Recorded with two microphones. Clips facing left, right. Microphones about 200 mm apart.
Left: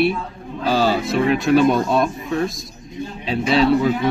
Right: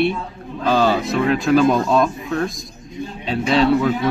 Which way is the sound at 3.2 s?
Centre (ahead or behind).